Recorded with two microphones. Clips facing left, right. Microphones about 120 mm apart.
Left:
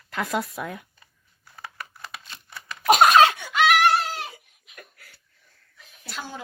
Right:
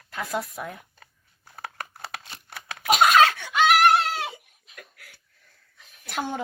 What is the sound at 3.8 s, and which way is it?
Goat, 70° right (ahead or behind).